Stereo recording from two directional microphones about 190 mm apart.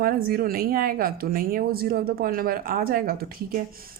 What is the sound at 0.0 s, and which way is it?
Speech, 50° right (ahead or behind).